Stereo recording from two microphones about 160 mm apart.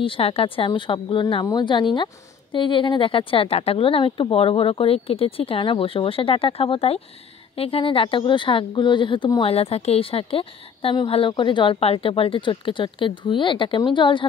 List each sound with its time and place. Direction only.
0.0 s speech: 35° left (ahead or behind)